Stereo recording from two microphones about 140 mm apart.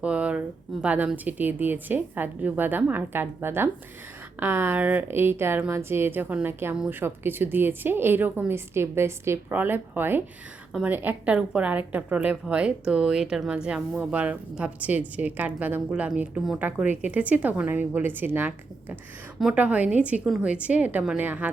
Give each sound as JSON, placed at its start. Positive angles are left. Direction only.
{"t": 0.0, "sound": "a woman's voice", "side_deg": -10}